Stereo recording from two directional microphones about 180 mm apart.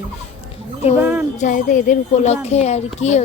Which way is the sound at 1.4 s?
45° left (ahead or behind).